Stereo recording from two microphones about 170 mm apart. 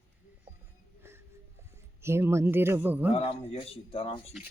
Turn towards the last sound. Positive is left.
turn(degrees=0)  # may be behind; listen again after turning